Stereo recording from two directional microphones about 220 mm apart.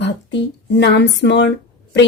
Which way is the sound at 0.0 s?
50° left (ahead or behind).